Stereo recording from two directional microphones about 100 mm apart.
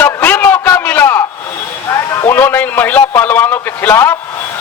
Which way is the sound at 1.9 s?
30° left (ahead or behind).